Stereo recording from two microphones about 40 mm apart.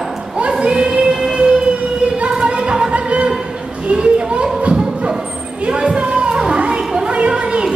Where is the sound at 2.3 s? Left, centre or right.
Right.